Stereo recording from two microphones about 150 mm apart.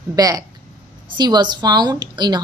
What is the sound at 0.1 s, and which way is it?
Speech, 25° right (ahead or behind).